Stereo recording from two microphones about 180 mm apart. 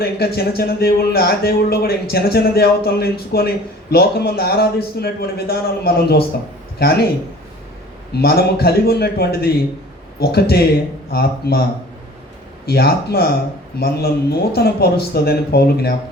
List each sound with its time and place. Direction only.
0.0 s a man's voice: 60° left (ahead or behind)
8.1 s a man's voice: 60° left (ahead or behind)
12.6 s a man's voice: 60° left (ahead or behind)